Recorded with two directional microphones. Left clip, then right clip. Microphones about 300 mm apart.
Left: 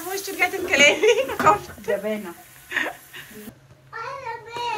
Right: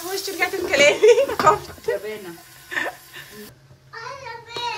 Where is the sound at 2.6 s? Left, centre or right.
Centre.